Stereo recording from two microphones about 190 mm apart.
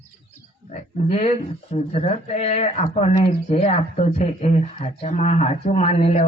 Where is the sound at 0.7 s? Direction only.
35° left (ahead or behind).